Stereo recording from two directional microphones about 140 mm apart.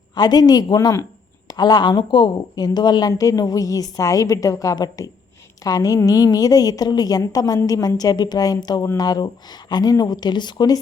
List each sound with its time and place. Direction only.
0.1 s a woman's voice: 30° left (ahead or behind)